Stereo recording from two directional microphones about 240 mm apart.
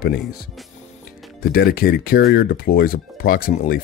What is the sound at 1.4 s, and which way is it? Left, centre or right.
Speech, left.